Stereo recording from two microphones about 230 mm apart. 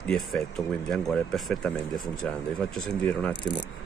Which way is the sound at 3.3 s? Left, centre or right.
Centre.